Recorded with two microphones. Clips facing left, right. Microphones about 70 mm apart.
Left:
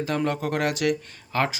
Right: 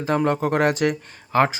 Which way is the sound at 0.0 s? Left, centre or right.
Right.